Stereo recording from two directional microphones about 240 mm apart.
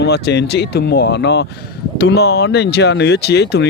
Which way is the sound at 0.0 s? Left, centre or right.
Left.